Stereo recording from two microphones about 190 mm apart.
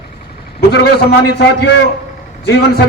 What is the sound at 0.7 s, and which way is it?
A man's voice, 60° left (ahead or behind).